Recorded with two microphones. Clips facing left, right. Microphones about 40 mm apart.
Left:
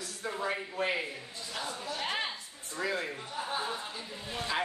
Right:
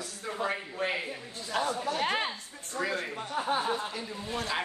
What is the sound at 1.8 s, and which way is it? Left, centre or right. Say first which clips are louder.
Speech: right 5 dB; right.